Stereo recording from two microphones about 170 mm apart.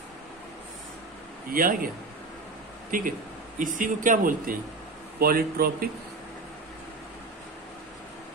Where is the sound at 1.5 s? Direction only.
55° right (ahead or behind).